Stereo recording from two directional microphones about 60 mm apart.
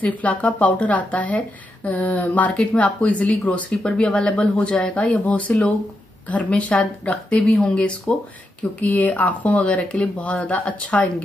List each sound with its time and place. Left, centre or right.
0.0 s speech: left